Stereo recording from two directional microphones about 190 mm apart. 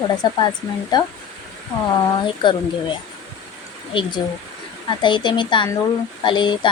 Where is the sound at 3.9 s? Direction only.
25° left (ahead or behind).